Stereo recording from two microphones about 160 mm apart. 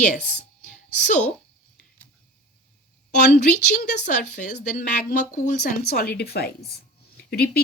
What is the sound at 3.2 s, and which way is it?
Speech, 90° left.